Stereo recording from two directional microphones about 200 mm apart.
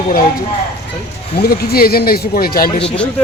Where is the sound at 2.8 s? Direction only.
5° left (ahead or behind).